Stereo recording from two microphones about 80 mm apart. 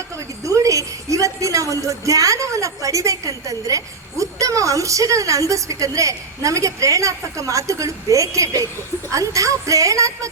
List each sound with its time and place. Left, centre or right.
0.4 s a woman's voice: right